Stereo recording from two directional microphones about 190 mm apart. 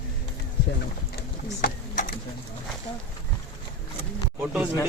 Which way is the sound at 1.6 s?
45° left (ahead or behind).